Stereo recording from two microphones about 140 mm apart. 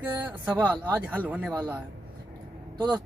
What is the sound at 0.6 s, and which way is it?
Speech, 10° right (ahead or behind).